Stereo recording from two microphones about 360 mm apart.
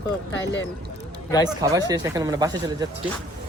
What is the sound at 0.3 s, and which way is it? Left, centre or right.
Speech, left.